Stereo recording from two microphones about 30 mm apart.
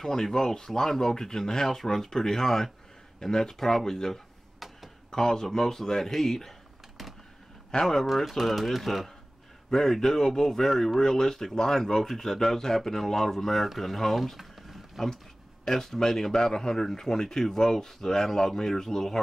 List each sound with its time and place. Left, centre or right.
0.0 s a man's voice: centre
5.1 s a man's voice: centre
7.8 s a man's voice: centre
8.3 s a man's voice: centre
14.3 s a sound: centre
15.6 s a man's voice: centre